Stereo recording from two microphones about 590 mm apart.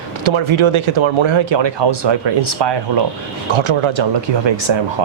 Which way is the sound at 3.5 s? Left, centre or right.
Right.